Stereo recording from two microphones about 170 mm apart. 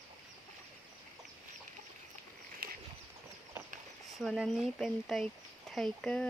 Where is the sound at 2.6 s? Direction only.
60° right (ahead or behind).